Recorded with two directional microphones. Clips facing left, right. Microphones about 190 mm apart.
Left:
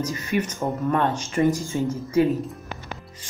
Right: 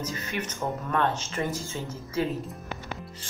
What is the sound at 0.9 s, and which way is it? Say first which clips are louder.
Speech: left 3 dB; 15° left (ahead or behind).